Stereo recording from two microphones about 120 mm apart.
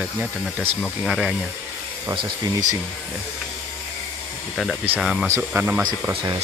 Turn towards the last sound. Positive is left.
turn(degrees=-15)  # may be behind; listen again after turning